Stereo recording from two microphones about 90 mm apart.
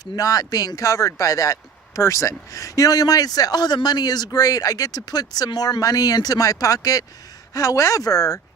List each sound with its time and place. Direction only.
0.0 s speech: 40° left (ahead or behind)